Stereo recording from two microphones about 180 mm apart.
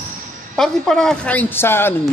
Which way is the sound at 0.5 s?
5° left (ahead or behind).